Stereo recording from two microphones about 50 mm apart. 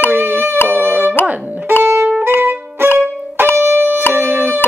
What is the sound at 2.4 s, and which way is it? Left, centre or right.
Violin, right.